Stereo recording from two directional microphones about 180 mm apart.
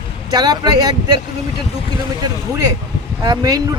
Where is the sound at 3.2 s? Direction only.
20° right (ahead or behind).